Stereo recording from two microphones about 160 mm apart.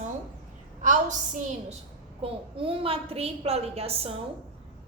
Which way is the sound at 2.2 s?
35° right (ahead or behind).